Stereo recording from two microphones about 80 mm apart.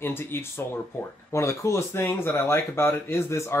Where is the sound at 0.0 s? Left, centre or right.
Left.